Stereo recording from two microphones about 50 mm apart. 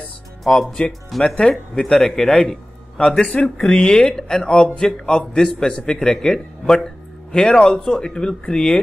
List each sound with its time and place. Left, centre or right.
0.4 s a man's voice: centre